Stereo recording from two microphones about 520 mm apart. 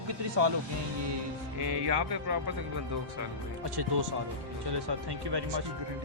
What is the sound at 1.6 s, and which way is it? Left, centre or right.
Speech, right.